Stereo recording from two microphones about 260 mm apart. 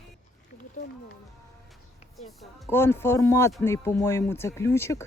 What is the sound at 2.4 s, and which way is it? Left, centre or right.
Speech, centre.